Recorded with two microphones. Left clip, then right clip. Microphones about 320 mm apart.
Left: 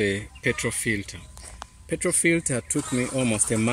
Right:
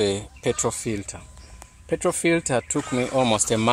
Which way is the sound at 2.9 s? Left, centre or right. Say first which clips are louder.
Right 5 dB; right.